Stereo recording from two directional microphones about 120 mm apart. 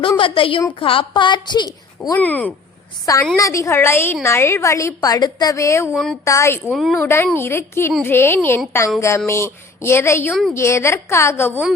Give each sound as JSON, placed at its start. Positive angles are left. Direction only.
{"t": 0.2, "sound": "a woman's voice", "side_deg": 45}
{"t": 2.1, "sound": "speech", "side_deg": 15}
{"t": 3.3, "sound": "a woman's voice", "side_deg": 25}
{"t": 5.9, "sound": "a woman's voice", "side_deg": 5}
{"t": 6.2, "sound": "a woman's voice", "side_deg": 25}
{"t": 6.7, "sound": "a woman's voice", "side_deg": 0}
{"t": 7.0, "sound": "a woman's voice", "side_deg": 20}